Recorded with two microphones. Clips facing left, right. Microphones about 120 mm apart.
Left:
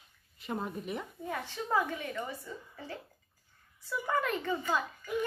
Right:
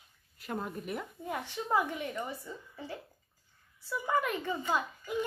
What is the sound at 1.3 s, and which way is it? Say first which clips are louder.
A woman's voice: right 1 dB; 15° right (ahead or behind).